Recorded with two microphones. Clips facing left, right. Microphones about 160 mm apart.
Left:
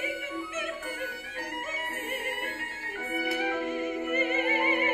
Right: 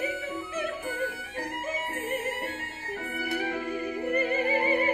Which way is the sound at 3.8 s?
35° right (ahead or behind).